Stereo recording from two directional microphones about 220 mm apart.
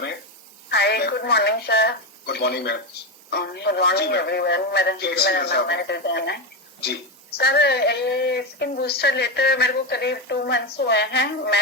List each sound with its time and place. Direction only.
0.7 s speech: 50° left (ahead or behind)